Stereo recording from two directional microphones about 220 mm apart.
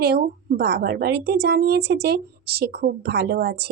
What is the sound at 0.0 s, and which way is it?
Speech, 45° right (ahead or behind).